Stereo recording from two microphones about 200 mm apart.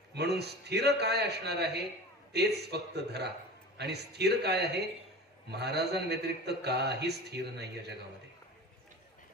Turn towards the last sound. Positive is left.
turn(degrees=-55)  # may be behind; listen again after turning